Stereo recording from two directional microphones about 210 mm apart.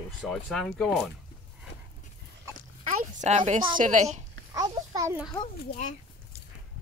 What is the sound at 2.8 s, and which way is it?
A woman's voice, 35° right (ahead or behind).